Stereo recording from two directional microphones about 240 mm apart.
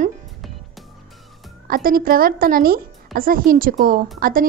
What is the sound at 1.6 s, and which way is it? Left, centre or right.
Speech, right.